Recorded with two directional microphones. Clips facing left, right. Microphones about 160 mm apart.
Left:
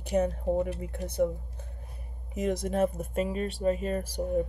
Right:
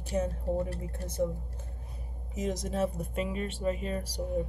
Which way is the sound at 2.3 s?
60° left (ahead or behind).